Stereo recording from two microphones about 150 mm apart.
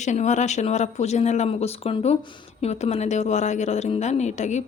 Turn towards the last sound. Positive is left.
turn(degrees=50)  # may be behind; listen again after turning